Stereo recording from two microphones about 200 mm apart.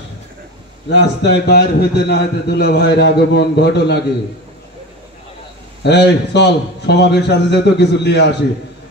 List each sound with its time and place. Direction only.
0.8 s a man's voice: 60° left (ahead or behind)
5.9 s a man's voice: 60° left (ahead or behind)